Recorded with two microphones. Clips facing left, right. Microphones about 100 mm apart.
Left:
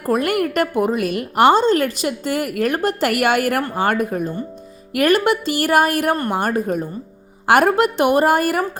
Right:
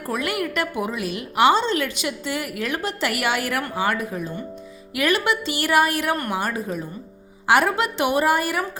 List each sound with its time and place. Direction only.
0.0 s a woman's voice: 45° left (ahead or behind)